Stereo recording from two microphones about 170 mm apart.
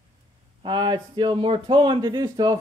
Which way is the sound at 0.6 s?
25° right (ahead or behind).